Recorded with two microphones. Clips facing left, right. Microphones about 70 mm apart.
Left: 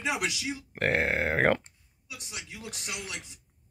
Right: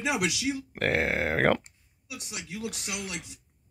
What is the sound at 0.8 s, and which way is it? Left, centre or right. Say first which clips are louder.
Speech: even; left.